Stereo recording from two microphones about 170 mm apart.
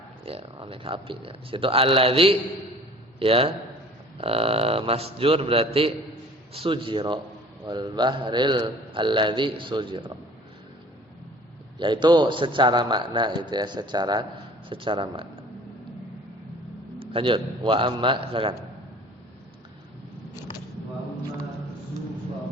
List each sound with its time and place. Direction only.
0.3 s a man's voice: 35° right (ahead or behind)
11.8 s a man's voice: 25° right (ahead or behind)
17.0 s a man's voice: 30° right (ahead or behind)